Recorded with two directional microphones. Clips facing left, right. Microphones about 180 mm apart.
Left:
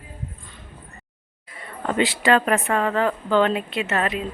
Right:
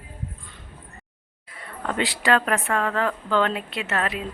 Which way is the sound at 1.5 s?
5° left (ahead or behind).